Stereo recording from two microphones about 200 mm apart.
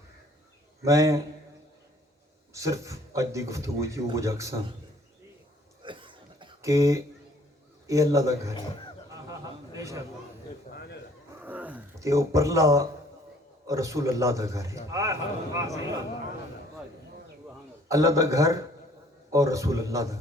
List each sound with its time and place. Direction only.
0.8 s a man's voice: 15° right (ahead or behind)
2.5 s a man's voice: 15° right (ahead or behind)
5.8 s a sound: 25° right (ahead or behind)
7.9 s a man's voice: 15° right (ahead or behind)
9.3 s a sound: 15° right (ahead or behind)
11.4 s a man's voice: 10° right (ahead or behind)
17.8 s a man's voice: 15° right (ahead or behind)